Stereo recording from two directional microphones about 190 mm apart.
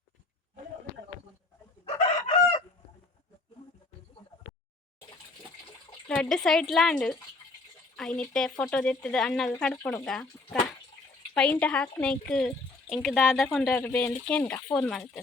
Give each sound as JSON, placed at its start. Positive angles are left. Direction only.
{"t": 1.8, "sound": "chicken", "side_deg": 30}
{"t": 6.1, "sound": "speech", "side_deg": 5}